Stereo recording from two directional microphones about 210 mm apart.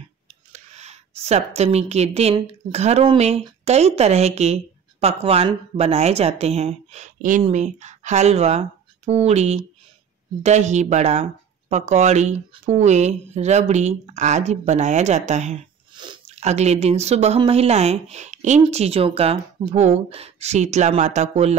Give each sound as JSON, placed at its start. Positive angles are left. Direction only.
{"t": 0.5, "sound": "a woman's voice", "side_deg": -30}